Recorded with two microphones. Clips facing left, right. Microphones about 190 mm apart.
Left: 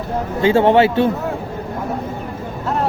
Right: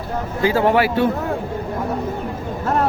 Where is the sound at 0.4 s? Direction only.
25° left (ahead or behind).